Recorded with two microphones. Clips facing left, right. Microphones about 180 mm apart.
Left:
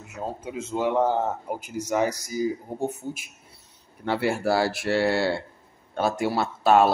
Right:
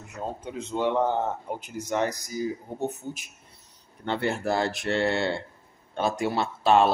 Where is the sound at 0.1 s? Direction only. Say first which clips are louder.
Left 2 dB; 5° left (ahead or behind).